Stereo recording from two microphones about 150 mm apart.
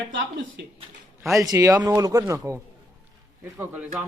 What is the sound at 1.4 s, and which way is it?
Speech, 20° right (ahead or behind).